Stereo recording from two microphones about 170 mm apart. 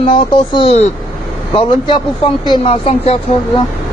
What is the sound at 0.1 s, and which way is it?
Speech, 35° left (ahead or behind).